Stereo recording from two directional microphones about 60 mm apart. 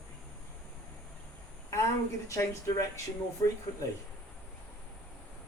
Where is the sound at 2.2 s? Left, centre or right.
Left.